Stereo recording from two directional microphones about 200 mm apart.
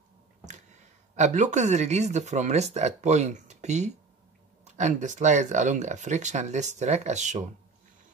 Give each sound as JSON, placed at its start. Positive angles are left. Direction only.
{"t": 1.1, "sound": "speech", "side_deg": -35}